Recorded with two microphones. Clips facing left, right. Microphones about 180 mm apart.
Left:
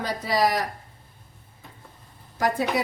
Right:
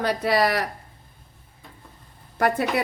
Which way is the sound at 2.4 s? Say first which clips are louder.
Right 2 dB; 60° right (ahead or behind).